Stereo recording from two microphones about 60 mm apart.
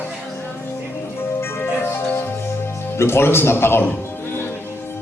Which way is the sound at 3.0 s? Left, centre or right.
Left.